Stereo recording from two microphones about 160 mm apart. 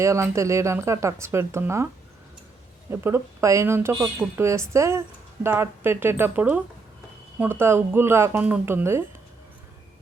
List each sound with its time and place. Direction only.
0.0 s a woman's voice: 20° right (ahead or behind)
2.9 s a woman's voice: 15° right (ahead or behind)